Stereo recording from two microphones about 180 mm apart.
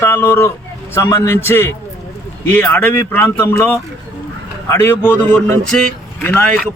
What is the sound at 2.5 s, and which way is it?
Speech, 10° left (ahead or behind).